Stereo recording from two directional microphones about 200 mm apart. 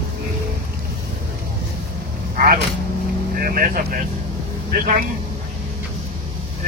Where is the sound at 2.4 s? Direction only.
45° right (ahead or behind).